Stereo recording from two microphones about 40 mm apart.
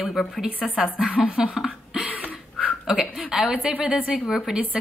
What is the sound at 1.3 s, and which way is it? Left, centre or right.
Speech, right.